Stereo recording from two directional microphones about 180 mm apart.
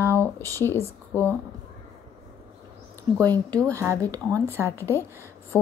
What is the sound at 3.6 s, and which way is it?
Speech, 15° right (ahead or behind).